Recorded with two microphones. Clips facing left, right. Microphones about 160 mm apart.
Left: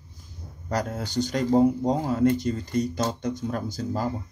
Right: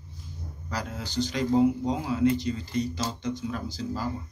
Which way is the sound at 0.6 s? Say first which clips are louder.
Left 6 dB; 45° left (ahead or behind).